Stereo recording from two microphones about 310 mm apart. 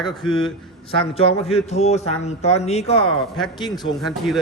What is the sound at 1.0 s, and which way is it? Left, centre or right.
Speech, centre.